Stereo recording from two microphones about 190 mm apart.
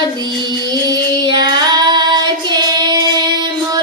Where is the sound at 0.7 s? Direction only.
20° right (ahead or behind).